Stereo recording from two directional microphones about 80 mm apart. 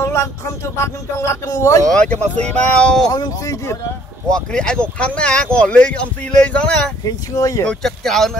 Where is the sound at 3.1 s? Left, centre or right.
Left.